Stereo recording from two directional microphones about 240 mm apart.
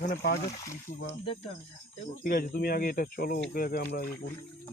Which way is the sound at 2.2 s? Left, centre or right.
Left.